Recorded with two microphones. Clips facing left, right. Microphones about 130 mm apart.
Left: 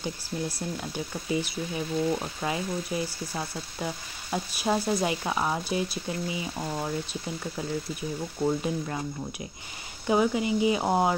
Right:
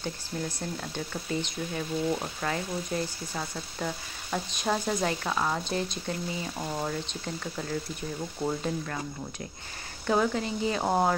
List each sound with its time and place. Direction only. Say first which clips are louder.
0.0 s speech: left 2 dB; 10° left (ahead or behind)
8.8 s speech: left 3 dB; 15° left (ahead or behind)